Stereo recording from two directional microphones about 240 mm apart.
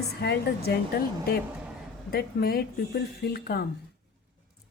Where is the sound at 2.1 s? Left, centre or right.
Left.